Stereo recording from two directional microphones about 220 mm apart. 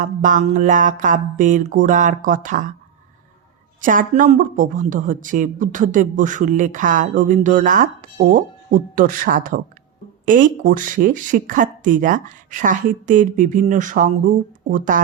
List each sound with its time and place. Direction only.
0.0 s speech: 35° right (ahead or behind)
3.8 s speech: 35° right (ahead or behind)